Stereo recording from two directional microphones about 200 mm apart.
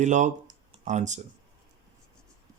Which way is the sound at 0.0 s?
35° right (ahead or behind).